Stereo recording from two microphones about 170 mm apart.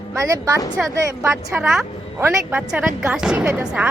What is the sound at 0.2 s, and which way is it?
A woman's voice, 20° right (ahead or behind).